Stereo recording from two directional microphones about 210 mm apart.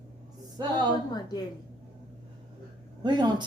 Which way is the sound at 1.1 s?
20° left (ahead or behind).